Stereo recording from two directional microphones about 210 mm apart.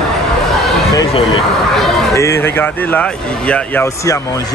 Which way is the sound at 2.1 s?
10° left (ahead or behind).